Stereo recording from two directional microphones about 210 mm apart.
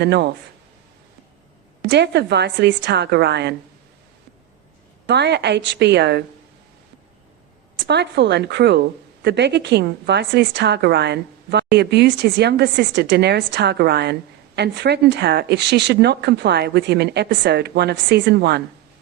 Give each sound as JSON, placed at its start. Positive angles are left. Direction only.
{"t": 0.0, "sound": "a woman's voice", "side_deg": -55}
{"t": 1.8, "sound": "a woman's voice", "side_deg": -55}
{"t": 5.0, "sound": "a woman's voice", "side_deg": -55}
{"t": 7.9, "sound": "a woman's voice", "side_deg": -55}